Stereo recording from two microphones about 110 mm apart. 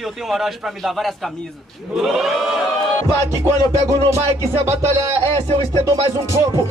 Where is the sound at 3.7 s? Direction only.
25° right (ahead or behind).